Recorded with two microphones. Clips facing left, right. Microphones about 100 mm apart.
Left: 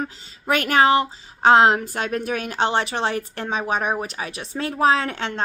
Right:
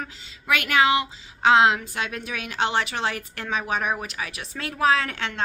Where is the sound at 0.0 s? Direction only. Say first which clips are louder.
Left 6 dB; 40° left (ahead or behind).